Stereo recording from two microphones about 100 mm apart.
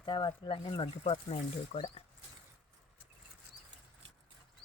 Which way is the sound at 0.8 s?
70° left (ahead or behind).